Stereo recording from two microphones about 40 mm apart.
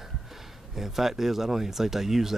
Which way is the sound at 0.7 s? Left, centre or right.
Centre.